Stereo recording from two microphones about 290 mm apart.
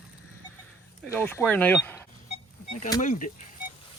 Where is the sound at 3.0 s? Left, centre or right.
Left.